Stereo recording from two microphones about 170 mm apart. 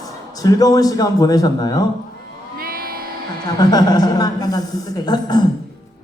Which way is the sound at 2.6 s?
60° right (ahead or behind).